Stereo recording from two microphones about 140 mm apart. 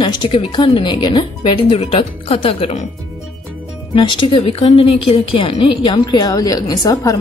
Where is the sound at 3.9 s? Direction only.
35° left (ahead or behind).